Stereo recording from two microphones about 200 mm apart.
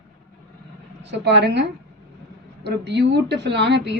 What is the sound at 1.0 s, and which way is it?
A woman's voice, 60° right (ahead or behind).